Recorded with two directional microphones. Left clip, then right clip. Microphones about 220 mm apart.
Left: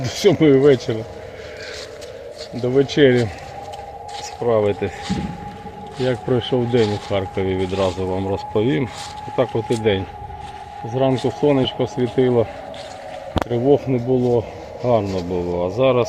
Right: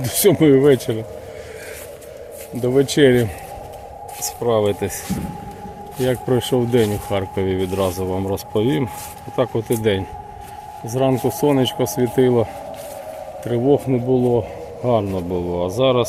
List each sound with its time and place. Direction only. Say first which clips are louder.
0.0 s speech: even; 15° right (ahead or behind)
2.9 s speech: even; 15° right (ahead or behind)
4.4 s speech: even; 15° right (ahead or behind)
6.1 s speech: right 1 dB; 20° right (ahead or behind)
13.5 s speech: even; 15° right (ahead or behind)